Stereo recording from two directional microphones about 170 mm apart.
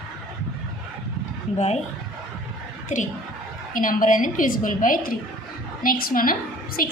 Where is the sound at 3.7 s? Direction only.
50° left (ahead or behind).